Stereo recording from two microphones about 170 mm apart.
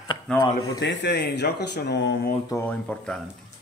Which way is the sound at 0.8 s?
90° left.